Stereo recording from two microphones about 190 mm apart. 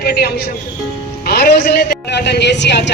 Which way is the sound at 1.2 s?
55° left (ahead or behind).